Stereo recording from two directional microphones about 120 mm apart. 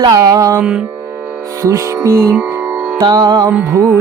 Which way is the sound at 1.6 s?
25° right (ahead or behind).